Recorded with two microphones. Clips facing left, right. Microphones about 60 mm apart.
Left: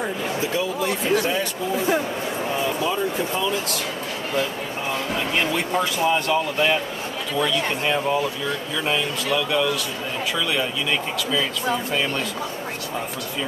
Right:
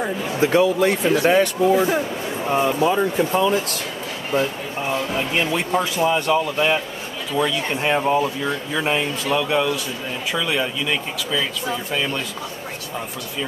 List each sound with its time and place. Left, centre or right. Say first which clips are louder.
0.4 s speech: right 10 dB; right
2.5 s speech: right 7 dB; right
5.1 s speech: left 1 dB; right
5.7 s speech: right 2 dB; centre